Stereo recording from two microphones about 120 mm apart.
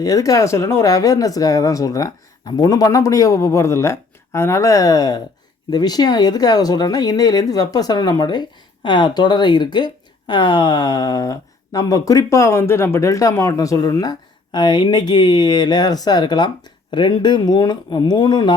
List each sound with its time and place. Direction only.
0.0 s speech: 30° left (ahead or behind)